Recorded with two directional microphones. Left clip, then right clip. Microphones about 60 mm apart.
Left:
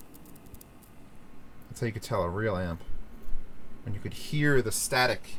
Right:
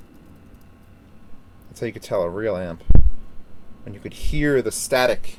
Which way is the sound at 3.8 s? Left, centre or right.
Right.